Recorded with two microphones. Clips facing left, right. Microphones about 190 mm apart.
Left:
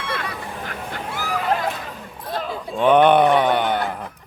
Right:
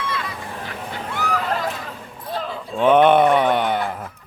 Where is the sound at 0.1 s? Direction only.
65° left (ahead or behind).